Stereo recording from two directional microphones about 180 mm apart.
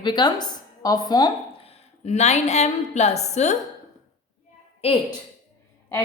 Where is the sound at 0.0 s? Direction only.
25° left (ahead or behind).